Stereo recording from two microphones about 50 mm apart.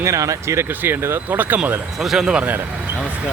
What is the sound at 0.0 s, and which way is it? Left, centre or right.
Speech, right.